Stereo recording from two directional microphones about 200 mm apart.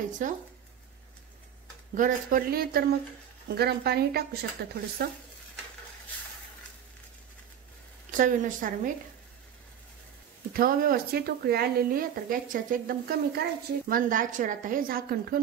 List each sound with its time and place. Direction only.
0.2 s a woman's voice: 40° right (ahead or behind)
2.0 s speech: 40° right (ahead or behind)
8.1 s a woman's voice: 40° right (ahead or behind)
10.5 s speech: 45° right (ahead or behind)